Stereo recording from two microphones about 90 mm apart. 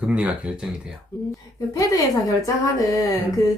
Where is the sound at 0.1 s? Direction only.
15° right (ahead or behind).